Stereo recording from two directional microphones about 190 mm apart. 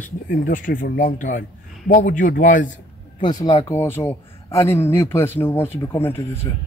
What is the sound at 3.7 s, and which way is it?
Speech, 10° left (ahead or behind).